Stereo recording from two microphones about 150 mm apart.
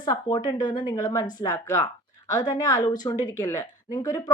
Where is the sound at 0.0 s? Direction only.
30° left (ahead or behind).